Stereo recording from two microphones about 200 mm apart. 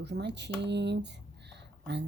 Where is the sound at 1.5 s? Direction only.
60° right (ahead or behind).